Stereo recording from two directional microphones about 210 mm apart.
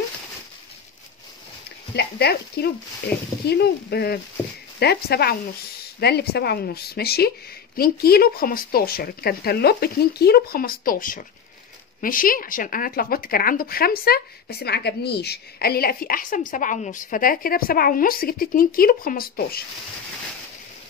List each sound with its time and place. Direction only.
2.0 s speech: 50° left (ahead or behind)
3.1 s speech: 5° left (ahead or behind)
3.4 s speech: 50° left (ahead or behind)